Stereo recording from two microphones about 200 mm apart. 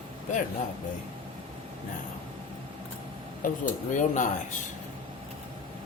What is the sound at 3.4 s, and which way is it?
Speech, 40° left (ahead or behind).